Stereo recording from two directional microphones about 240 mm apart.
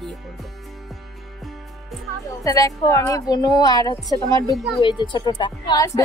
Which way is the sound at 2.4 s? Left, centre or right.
Centre.